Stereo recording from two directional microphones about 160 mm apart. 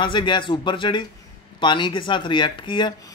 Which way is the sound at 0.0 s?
30° left (ahead or behind).